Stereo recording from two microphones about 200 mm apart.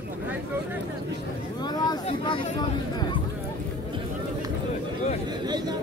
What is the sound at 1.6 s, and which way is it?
Speech, 20° left (ahead or behind).